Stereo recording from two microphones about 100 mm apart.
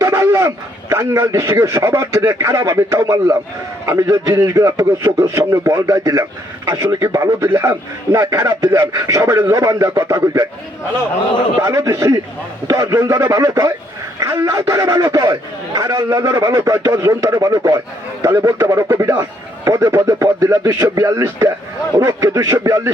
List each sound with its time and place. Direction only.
0.0 s a man's voice: 30° right (ahead or behind)
7.4 s a man's voice: 20° right (ahead or behind)
8.1 s a man's voice: 30° right (ahead or behind)
11.6 s a man's voice: 30° right (ahead or behind)